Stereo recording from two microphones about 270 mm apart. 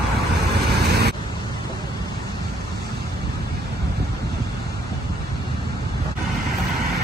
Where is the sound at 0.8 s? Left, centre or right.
Right.